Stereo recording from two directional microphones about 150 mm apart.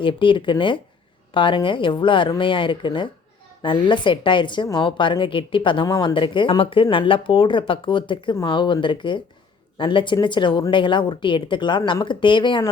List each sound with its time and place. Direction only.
0.0 s a woman's voice: 35° left (ahead or behind)